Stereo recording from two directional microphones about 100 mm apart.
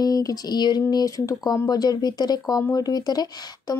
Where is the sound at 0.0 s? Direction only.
35° left (ahead or behind).